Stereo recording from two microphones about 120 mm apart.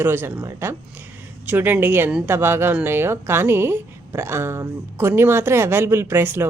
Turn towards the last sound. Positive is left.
turn(degrees=-20)  # may be behind; listen again after turning